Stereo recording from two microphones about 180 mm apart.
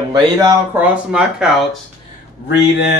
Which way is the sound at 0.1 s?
20° right (ahead or behind).